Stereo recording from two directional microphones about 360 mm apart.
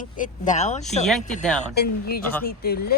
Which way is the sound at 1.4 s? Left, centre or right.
Centre.